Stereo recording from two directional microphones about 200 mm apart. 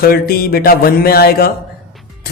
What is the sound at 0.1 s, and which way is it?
Speech, 50° left (ahead or behind).